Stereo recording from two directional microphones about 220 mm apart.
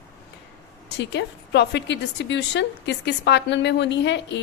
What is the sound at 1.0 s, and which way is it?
A woman's voice, 50° left (ahead or behind).